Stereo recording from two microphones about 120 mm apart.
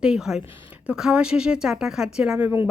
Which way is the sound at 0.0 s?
5° right (ahead or behind).